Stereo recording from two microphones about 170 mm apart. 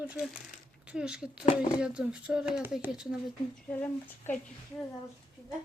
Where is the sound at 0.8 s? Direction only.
5° right (ahead or behind).